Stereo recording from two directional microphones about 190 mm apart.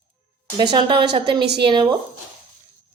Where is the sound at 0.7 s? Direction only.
25° right (ahead or behind).